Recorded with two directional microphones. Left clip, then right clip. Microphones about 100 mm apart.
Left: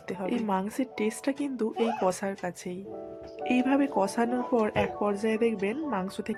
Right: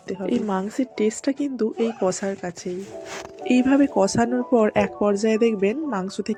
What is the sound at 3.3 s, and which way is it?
Speech, 50° right (ahead or behind).